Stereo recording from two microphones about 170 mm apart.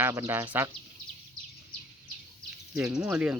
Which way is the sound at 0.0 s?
15° right (ahead or behind).